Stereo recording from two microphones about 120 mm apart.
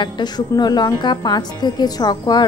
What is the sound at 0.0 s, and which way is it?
A woman's voice, 35° left (ahead or behind).